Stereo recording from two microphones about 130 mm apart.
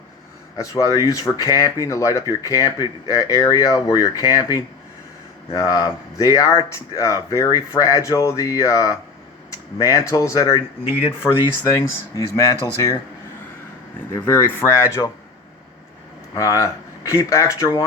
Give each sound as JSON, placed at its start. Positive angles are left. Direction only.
{"t": 0.5, "sound": "speech", "side_deg": 25}
{"t": 11.8, "sound": "speech", "side_deg": 25}
{"t": 14.3, "sound": "speech", "side_deg": 15}
{"t": 16.3, "sound": "speech", "side_deg": 25}